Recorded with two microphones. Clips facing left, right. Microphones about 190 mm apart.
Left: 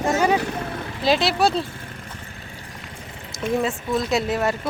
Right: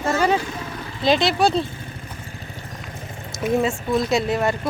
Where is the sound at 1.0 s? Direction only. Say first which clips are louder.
Right 1 dB; 5° left (ahead or behind).